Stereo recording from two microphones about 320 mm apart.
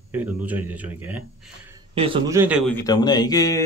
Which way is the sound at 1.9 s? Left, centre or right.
Centre.